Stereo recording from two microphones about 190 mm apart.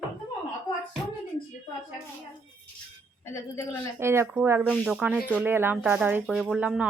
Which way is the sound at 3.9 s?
15° right (ahead or behind).